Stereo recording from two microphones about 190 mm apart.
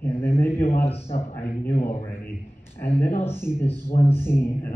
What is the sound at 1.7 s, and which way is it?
Speech, 35° left (ahead or behind).